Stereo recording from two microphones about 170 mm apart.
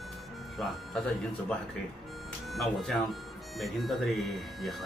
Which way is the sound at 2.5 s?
Centre (ahead or behind).